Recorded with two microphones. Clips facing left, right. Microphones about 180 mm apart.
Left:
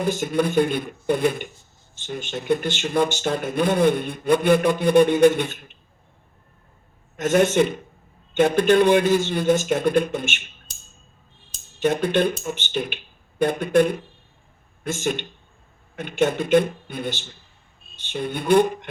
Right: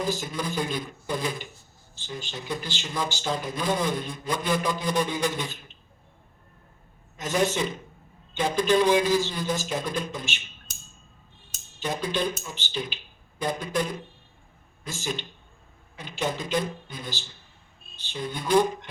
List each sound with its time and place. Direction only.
0.0 s speech: 60° left (ahead or behind)
7.2 s speech: 60° left (ahead or behind)
11.8 s speech: 60° left (ahead or behind)
18.1 s speech: 60° left (ahead or behind)